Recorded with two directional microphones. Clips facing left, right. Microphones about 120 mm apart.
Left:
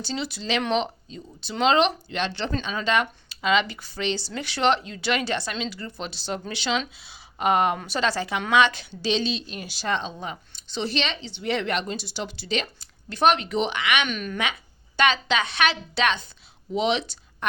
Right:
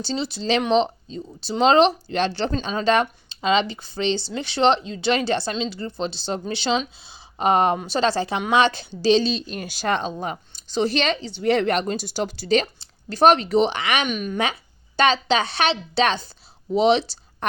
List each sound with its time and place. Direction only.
0.0 s a woman's voice: 30° right (ahead or behind)
14.1 s a woman's voice: 20° right (ahead or behind)
14.3 s a woman's voice: 35° right (ahead or behind)